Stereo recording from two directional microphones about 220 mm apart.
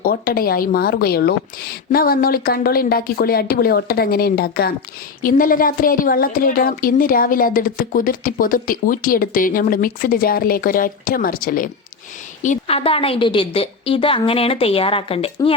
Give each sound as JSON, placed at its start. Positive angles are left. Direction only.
{"t": 0.0, "sound": "a woman's voice", "side_deg": 40}